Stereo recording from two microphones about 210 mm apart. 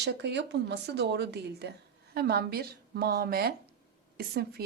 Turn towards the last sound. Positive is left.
turn(degrees=-50)  # may be behind; listen again after turning